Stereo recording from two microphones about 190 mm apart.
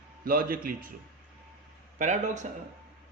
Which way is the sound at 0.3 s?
50° right (ahead or behind).